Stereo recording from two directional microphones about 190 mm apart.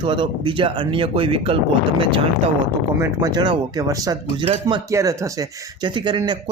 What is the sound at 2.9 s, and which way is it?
Speech, 15° right (ahead or behind).